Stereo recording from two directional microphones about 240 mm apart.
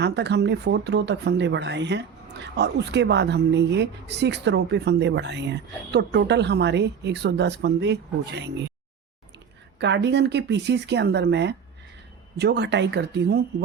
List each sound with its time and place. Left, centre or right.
0.0 s speech: right
9.8 s speech: right